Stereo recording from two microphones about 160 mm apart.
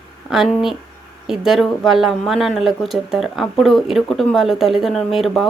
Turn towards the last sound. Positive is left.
turn(degrees=0)  # may be behind; listen again after turning